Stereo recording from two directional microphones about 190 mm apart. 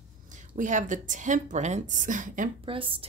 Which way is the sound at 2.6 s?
25° right (ahead or behind).